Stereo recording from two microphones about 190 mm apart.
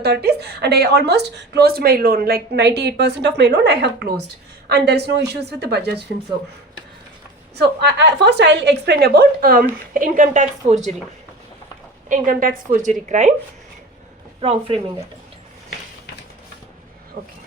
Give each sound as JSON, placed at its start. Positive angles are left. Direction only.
{"t": 0.0, "sound": "a woman's voice", "side_deg": -60}
{"t": 7.6, "sound": "a woman's voice", "side_deg": -60}
{"t": 12.0, "sound": "a woman's voice", "side_deg": -45}